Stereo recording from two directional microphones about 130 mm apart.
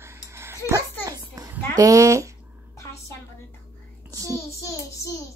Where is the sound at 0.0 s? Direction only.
20° right (ahead or behind).